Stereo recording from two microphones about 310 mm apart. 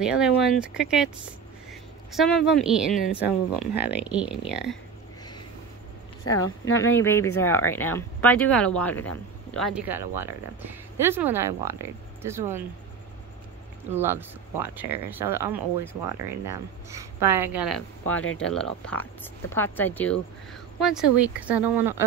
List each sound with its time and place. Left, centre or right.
0.0 s speech: centre
6.2 s a woman's voice: left
6.8 s speech: centre
13.8 s speech: centre